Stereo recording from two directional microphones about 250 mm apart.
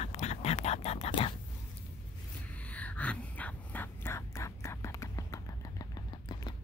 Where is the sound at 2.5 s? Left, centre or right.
Centre.